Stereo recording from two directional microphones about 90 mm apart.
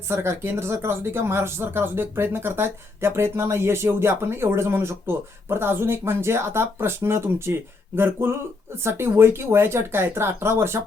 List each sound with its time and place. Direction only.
0.1 s speech: 30° right (ahead or behind)